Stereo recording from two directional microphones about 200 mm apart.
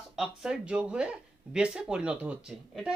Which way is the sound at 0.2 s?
5° right (ahead or behind).